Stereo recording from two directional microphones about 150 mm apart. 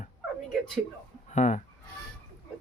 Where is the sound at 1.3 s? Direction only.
50° left (ahead or behind).